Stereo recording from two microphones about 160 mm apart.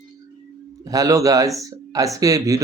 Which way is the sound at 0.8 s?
20° right (ahead or behind).